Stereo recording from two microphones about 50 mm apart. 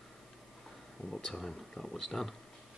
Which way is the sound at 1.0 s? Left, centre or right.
Centre.